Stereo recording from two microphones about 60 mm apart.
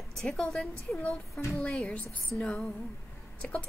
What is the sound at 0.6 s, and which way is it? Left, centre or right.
A woman's voice, left.